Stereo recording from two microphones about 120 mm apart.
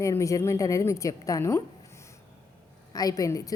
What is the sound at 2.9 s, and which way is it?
Speech, 30° left (ahead or behind).